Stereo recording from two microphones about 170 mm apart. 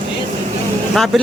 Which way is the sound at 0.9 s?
Centre (ahead or behind).